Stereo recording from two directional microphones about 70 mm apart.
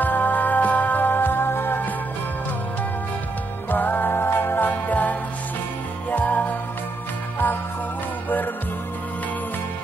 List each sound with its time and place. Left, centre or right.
0.0 s music: left
3.7 s music: left